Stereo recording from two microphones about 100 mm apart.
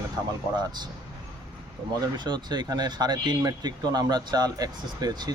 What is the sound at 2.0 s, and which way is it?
Speech, 50° right (ahead or behind).